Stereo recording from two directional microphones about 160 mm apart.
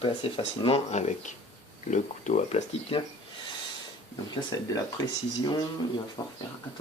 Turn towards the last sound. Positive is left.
turn(degrees=25)  # may be behind; listen again after turning